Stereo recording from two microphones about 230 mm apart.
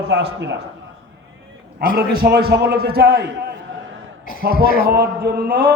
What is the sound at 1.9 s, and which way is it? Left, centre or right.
A man's voice, right.